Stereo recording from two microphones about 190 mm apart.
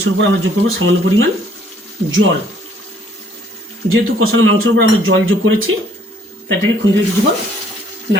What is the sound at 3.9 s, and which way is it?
Speech, 90° right.